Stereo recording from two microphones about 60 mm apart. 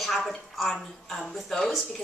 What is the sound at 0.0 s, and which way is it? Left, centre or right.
A woman's voice, centre.